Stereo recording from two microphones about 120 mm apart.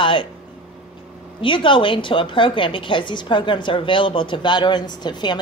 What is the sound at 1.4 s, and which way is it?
A woman's voice, 45° left (ahead or behind).